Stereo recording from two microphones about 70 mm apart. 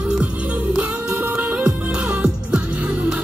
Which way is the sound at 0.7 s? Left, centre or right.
Right.